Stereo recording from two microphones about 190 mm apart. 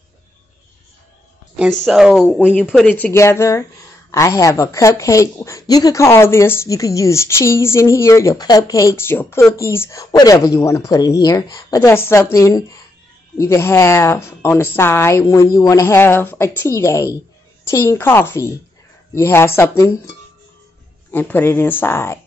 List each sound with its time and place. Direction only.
1.6 s speech: centre (ahead or behind)
2.9 s a woman's voice: 10° left (ahead or behind)
21.1 s a woman's voice: 10° left (ahead or behind)